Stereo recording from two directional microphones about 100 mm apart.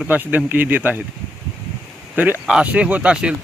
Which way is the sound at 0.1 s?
15° right (ahead or behind).